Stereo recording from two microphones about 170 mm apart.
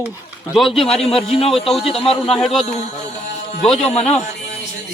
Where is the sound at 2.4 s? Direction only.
Centre (ahead or behind).